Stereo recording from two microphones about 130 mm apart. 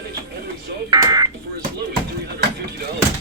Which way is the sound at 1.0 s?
30° right (ahead or behind).